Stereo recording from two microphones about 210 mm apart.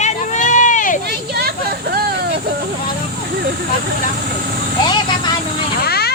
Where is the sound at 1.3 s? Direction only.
50° right (ahead or behind).